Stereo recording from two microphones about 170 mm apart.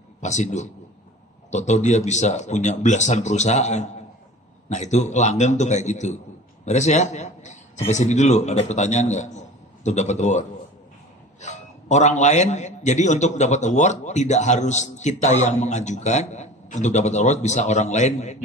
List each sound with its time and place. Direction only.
0.2 s a man's voice: 45° left (ahead or behind)
11.4 s a man's voice: 45° left (ahead or behind)